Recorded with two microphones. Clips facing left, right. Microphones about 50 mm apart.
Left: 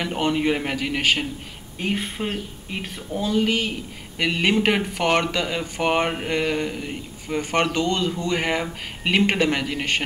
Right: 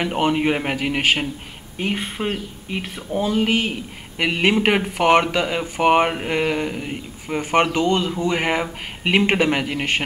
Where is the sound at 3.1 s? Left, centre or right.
Right.